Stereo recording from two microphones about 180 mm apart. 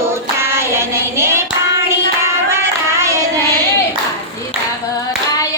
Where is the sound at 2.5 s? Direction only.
15° right (ahead or behind).